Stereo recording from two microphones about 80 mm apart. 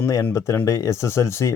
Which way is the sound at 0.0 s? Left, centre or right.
Left.